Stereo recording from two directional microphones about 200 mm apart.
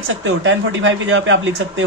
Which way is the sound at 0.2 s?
70° right (ahead or behind).